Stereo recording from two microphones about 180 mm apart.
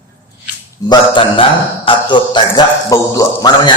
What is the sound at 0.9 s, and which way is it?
A man's voice, 30° left (ahead or behind).